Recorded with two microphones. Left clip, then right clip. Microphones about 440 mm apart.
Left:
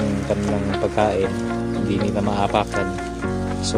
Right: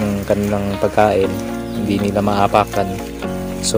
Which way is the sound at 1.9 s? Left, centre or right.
Left.